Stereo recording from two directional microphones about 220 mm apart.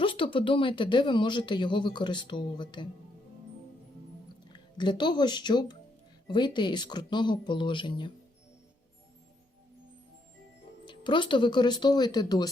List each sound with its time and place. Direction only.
0.0 s speech: 25° left (ahead or behind)
4.5 s speech: 20° left (ahead or behind)
10.8 s speech: 20° left (ahead or behind)